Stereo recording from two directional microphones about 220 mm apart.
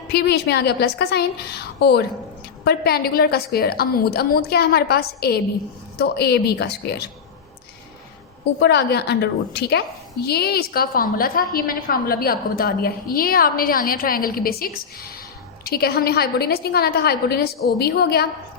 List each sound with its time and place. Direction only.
0.1 s a woman's voice: 50° left (ahead or behind)
8.5 s a woman's voice: 50° left (ahead or behind)